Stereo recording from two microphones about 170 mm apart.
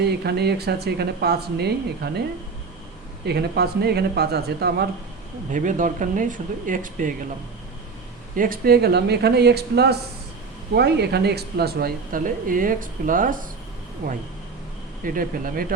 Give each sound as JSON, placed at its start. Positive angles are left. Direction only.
{"t": 0.0, "sound": "speech", "side_deg": -75}
{"t": 3.2, "sound": "speech", "side_deg": -70}
{"t": 5.5, "sound": "speech", "side_deg": -50}
{"t": 8.4, "sound": "speech", "side_deg": -60}
{"t": 15.0, "sound": "speech", "side_deg": -55}